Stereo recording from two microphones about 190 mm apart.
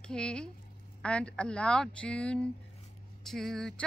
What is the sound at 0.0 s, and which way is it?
A woman's voice, 5° left (ahead or behind).